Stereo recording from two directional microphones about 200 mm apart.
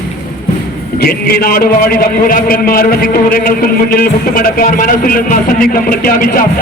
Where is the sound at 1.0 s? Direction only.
50° left (ahead or behind).